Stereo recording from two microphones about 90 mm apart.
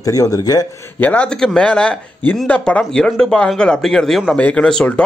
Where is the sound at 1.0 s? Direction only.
15° left (ahead or behind).